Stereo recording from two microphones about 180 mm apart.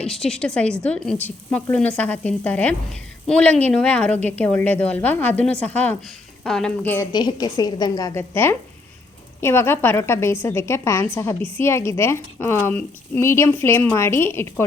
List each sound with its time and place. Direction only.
0.0 s a woman's voice: 5° left (ahead or behind)
7.1 s a woman's voice: 25° left (ahead or behind)